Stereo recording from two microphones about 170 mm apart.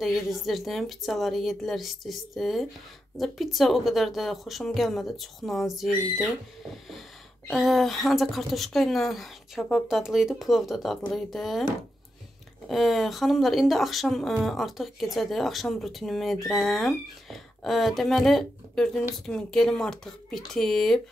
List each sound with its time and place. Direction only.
0.0 s a woman's voice: centre (ahead or behind)
7.4 s a woman's voice: centre (ahead or behind)
12.6 s a woman's voice: centre (ahead or behind)